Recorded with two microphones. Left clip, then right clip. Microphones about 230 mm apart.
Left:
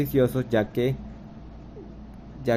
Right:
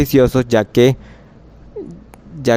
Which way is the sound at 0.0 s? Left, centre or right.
Right.